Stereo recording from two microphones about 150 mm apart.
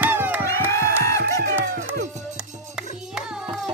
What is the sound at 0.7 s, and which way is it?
Music, 20° left (ahead or behind).